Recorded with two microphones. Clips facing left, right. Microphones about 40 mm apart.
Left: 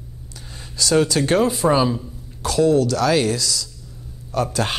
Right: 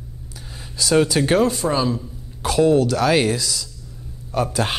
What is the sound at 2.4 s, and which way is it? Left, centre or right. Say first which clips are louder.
Speech: right 1 dB; right.